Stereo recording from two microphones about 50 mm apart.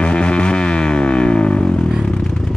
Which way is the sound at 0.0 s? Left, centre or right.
Left.